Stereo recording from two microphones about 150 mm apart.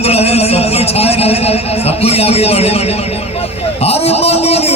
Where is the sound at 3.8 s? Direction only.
45° left (ahead or behind).